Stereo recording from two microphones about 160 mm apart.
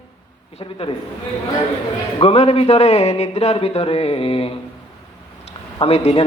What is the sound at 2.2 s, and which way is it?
A man's voice, 40° left (ahead or behind).